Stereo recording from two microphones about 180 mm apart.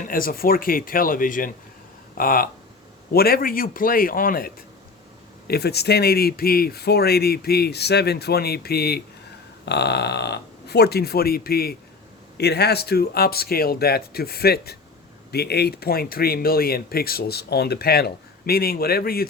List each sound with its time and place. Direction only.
0.0 s speech: 50° left (ahead or behind)